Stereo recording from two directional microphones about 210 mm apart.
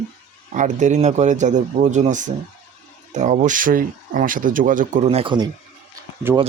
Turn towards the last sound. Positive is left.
turn(degrees=-10)  # may be behind; listen again after turning